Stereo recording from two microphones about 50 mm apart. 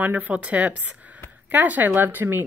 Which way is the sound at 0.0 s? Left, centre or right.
Right.